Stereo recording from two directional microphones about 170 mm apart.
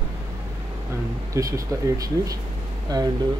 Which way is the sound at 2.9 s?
20° right (ahead or behind).